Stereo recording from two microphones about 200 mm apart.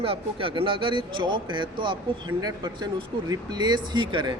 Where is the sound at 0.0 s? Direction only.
25° right (ahead or behind).